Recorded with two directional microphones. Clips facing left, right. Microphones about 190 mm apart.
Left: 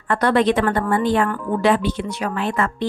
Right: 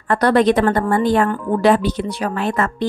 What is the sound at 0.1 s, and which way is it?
A woman's voice, 40° right (ahead or behind).